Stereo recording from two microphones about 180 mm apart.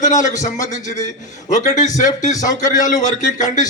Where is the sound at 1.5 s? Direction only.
45° left (ahead or behind).